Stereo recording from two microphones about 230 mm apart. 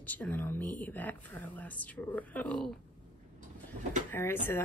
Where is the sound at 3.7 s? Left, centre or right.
Right.